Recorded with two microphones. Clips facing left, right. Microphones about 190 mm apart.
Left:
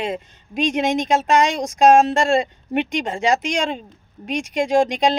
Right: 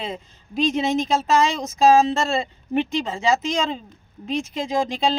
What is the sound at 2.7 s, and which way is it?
Speech, 70° left (ahead or behind).